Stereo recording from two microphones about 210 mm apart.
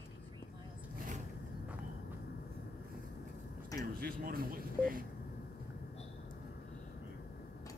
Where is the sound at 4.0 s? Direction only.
45° right (ahead or behind).